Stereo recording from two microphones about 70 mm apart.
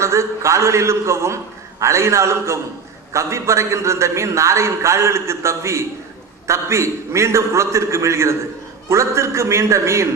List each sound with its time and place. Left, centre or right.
0.0 s a man's voice: right